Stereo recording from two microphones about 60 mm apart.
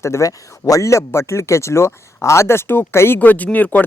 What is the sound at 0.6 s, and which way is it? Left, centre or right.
Speech, left.